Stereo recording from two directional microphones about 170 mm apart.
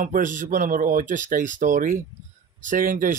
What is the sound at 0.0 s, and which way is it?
Speech, 50° right (ahead or behind).